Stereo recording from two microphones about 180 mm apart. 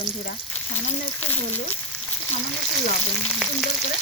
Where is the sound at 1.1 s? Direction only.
10° left (ahead or behind).